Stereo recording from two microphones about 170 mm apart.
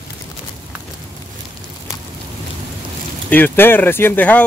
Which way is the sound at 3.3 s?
10° left (ahead or behind).